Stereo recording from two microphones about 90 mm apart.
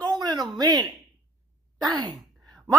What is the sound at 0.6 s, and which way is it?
Speech, 45° right (ahead or behind).